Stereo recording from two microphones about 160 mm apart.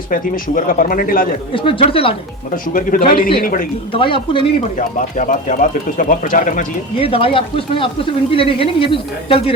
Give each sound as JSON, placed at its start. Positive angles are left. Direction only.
{"t": 0.1, "sound": "speech", "side_deg": 60}
{"t": 1.5, "sound": "speech", "side_deg": 35}
{"t": 3.2, "sound": "speech", "side_deg": 65}
{"t": 3.9, "sound": "speech", "side_deg": 35}
{"t": 4.8, "sound": "speech", "side_deg": 55}
{"t": 6.9, "sound": "speech", "side_deg": 35}